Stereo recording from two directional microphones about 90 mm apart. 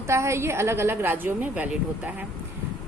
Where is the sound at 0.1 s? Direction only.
30° right (ahead or behind).